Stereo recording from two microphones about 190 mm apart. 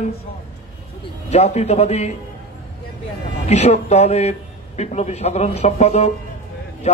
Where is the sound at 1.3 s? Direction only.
35° left (ahead or behind).